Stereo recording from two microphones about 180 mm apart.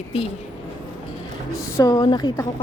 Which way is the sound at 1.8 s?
25° left (ahead or behind).